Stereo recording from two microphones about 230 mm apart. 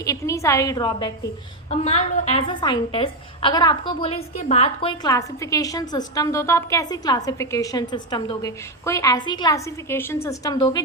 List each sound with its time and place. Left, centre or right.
0.0 s a woman's voice: centre
1.7 s a woman's voice: left